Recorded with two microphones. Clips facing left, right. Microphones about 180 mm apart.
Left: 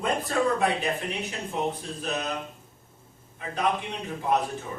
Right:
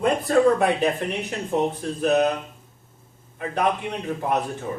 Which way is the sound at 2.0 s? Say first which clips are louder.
Right 13 dB; 60° right (ahead or behind).